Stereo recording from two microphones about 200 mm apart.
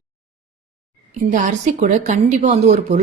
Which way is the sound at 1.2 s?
40° right (ahead or behind).